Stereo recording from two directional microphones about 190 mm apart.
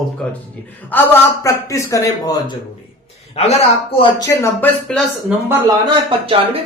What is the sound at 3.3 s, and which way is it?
Speech, 35° left (ahead or behind).